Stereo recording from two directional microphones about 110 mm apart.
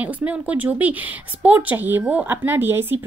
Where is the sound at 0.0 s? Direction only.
15° right (ahead or behind).